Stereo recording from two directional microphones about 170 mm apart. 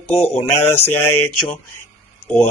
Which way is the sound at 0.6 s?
10° left (ahead or behind).